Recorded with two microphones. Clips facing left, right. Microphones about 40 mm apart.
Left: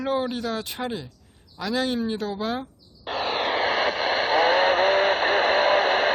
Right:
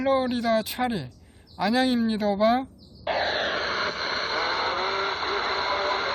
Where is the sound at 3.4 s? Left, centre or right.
Left.